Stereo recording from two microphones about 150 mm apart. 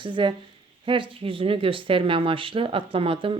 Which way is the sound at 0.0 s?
30° right (ahead or behind).